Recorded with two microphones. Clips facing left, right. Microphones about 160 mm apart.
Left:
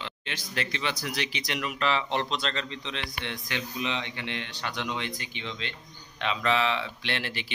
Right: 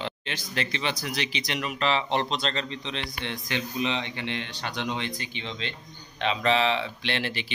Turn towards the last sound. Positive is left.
turn(degrees=-20)  # may be behind; listen again after turning